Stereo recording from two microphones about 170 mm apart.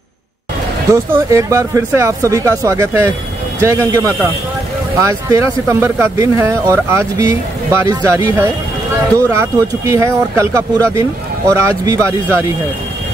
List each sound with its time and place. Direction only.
0.9 s a man's voice: 15° right (ahead or behind)